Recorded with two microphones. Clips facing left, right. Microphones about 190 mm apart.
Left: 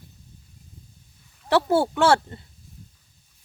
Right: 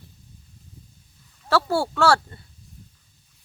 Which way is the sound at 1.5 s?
20° left (ahead or behind).